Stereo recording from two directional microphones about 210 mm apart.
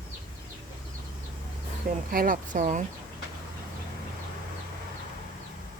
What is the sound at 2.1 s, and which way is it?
Speech, 40° right (ahead or behind).